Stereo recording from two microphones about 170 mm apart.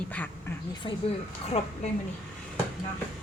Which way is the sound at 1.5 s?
35° left (ahead or behind).